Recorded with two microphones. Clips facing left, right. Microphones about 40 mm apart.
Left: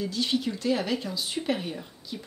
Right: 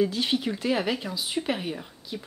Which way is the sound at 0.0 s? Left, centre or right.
Right.